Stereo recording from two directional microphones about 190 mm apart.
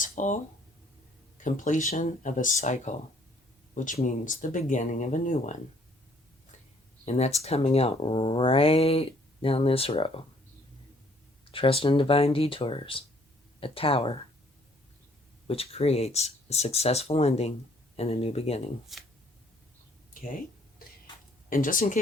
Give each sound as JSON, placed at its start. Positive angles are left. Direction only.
{"t": 0.0, "sound": "a sound", "side_deg": 40}
{"t": 1.4, "sound": "speech", "side_deg": 40}
{"t": 7.0, "sound": "speech", "side_deg": 35}
{"t": 11.5, "sound": "speech", "side_deg": 30}
{"t": 15.4, "sound": "speech", "side_deg": 30}
{"t": 18.9, "sound": "speech", "side_deg": 0}
{"t": 20.2, "sound": "a sound", "side_deg": 50}
{"t": 21.5, "sound": "speech", "side_deg": 45}